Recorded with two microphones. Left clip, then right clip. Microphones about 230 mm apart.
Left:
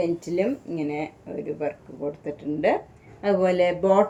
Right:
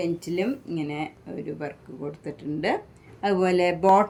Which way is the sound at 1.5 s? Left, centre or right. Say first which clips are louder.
Left 7 dB; right.